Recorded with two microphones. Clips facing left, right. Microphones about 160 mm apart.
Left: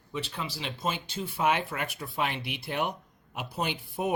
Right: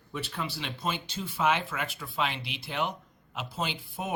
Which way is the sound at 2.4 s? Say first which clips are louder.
Left 1 dB; 55° left (ahead or behind).